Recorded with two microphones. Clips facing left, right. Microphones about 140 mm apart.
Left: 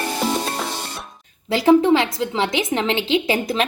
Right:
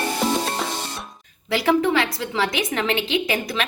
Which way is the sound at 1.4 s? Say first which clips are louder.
Left 5 dB; 25° left (ahead or behind).